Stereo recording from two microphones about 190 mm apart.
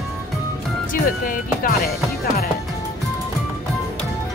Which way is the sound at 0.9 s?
50° left (ahead or behind).